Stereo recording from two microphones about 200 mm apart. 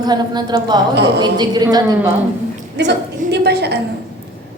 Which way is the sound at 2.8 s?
55° right (ahead or behind).